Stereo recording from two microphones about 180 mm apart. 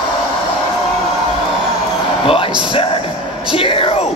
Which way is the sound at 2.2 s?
30° left (ahead or behind).